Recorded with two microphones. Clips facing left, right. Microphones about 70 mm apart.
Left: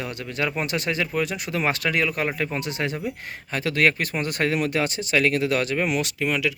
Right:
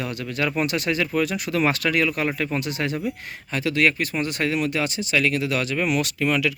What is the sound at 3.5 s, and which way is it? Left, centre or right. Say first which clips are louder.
Speech: even; left.